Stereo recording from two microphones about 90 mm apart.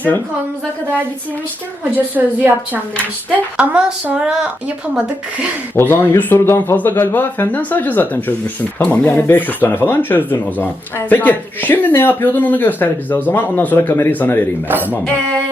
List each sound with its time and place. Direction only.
2.1 s a woman's voice: 20° right (ahead or behind)
5.7 s speech: 25° left (ahead or behind)
14.8 s music: 10° left (ahead or behind)